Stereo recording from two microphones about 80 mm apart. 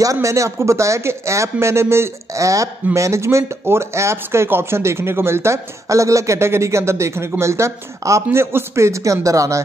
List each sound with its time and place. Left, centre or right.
0.0 s speech: right